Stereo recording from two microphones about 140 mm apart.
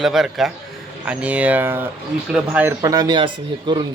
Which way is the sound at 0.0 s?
Centre (ahead or behind).